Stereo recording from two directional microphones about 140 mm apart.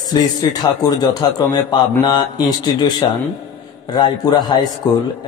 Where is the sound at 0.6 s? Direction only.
25° left (ahead or behind).